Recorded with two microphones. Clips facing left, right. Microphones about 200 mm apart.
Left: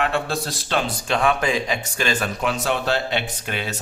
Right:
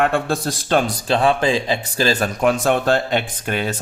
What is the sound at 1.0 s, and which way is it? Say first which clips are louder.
Speech: right 2 dB; 30° right (ahead or behind).